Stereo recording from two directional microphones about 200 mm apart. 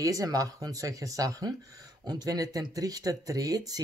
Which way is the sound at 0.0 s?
15° right (ahead or behind).